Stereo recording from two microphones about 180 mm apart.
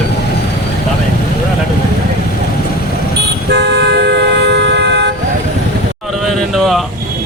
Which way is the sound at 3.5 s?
70° right (ahead or behind).